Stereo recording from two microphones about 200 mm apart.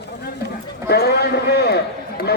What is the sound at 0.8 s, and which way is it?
Speech, 55° left (ahead or behind).